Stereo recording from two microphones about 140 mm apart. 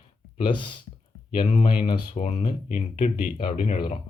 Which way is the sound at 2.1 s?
50° left (ahead or behind).